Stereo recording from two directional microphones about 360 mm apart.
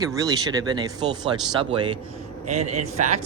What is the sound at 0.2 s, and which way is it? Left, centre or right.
Speech, centre.